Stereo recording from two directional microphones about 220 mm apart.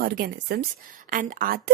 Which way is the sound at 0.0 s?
45° right (ahead or behind).